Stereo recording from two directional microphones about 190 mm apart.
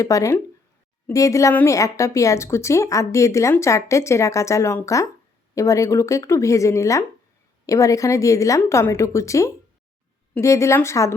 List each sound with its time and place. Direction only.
0.0 s a woman's voice: 15° left (ahead or behind)